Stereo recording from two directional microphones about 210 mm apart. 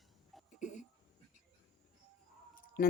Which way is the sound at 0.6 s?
35° left (ahead or behind).